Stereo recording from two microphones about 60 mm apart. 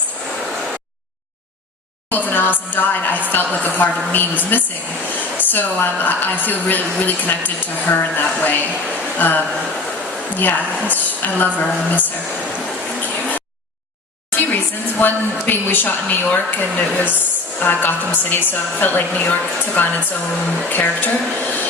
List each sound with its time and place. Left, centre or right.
2.0 s a woman's voice: left
13.0 s a sound: left
14.3 s a woman's voice: left